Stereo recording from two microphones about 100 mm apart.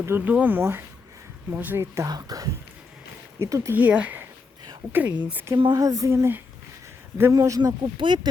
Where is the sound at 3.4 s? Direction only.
30° right (ahead or behind).